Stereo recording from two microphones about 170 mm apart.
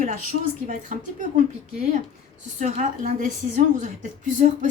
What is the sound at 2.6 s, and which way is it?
A woman's voice, 50° right (ahead or behind).